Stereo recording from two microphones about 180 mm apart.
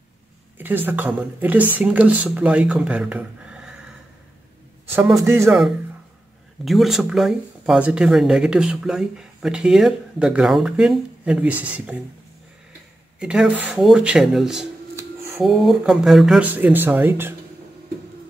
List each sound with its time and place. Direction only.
0.6 s speech: 10° right (ahead or behind)
5.1 s speech: 15° right (ahead or behind)
6.6 s speech: centre (ahead or behind)
13.2 s speech: 5° right (ahead or behind)